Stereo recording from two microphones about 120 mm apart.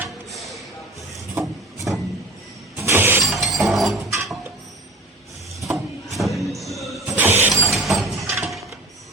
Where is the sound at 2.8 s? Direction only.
20° right (ahead or behind).